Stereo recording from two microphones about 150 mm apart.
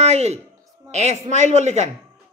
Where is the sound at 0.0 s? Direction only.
50° right (ahead or behind).